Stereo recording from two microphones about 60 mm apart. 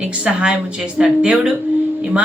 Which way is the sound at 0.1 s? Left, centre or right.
Right.